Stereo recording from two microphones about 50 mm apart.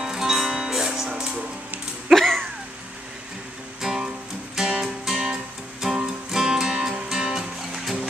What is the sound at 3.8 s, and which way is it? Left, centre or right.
Music, centre.